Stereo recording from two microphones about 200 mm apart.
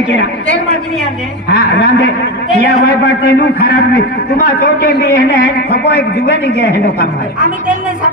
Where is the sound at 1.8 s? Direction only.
55° left (ahead or behind).